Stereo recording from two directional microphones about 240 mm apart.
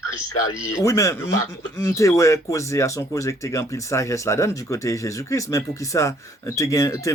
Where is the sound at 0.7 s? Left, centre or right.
Centre.